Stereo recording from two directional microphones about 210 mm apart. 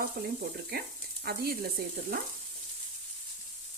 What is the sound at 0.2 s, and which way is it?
Frying, 45° right (ahead or behind).